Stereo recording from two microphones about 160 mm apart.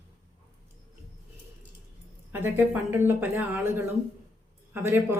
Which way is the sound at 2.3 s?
10° right (ahead or behind).